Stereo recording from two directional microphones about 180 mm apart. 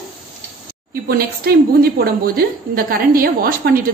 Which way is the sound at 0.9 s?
55° right (ahead or behind).